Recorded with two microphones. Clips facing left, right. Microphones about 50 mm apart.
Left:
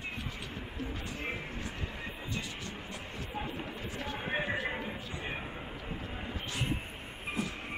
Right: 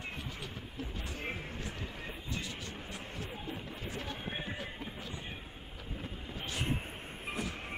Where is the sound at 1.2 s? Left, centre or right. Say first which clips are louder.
Left 2 dB; left.